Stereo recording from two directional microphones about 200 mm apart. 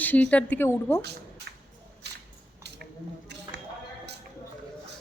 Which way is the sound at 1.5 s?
55° right (ahead or behind).